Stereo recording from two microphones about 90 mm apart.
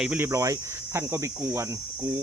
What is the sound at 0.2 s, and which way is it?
Speech, 35° right (ahead or behind).